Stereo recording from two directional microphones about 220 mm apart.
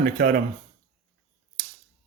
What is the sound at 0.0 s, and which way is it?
Speech, 40° right (ahead or behind).